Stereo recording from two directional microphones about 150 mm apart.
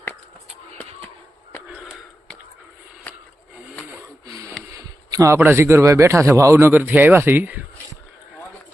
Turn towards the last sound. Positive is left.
turn(degrees=-10)  # may be behind; listen again after turning